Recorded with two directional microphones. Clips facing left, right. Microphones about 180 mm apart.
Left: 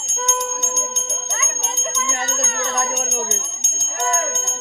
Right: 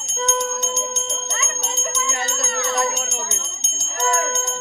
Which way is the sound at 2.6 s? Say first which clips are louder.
Right 3 dB; 45° left (ahead or behind).